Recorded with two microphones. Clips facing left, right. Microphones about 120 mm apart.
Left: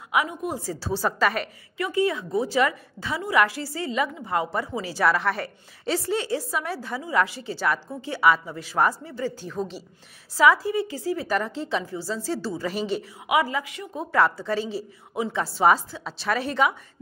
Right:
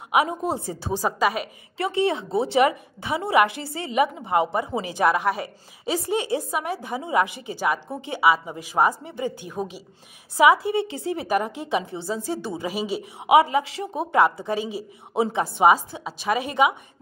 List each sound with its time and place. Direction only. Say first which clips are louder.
0.1 s a woman's voice: right 4 dB; 30° right (ahead or behind)
0.7 s a woman's voice: right 1 dB; 20° right (ahead or behind)
1.8 s a woman's voice: right 1 dB; 25° right (ahead or behind); by 13.1 s 10° right (ahead or behind)
13.2 s a woman's voice: right 7 dB; 25° right (ahead or behind)